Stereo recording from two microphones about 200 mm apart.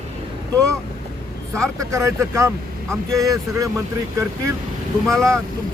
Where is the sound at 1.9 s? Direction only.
15° right (ahead or behind).